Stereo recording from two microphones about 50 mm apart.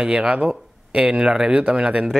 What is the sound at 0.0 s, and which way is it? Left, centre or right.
Speech, centre.